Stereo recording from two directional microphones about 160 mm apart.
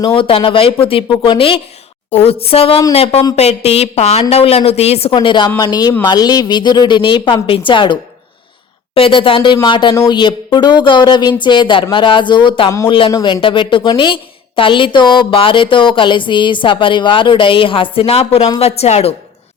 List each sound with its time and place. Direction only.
0.0 s a woman's voice: 35° left (ahead or behind)
9.0 s a woman's voice: 35° left (ahead or behind)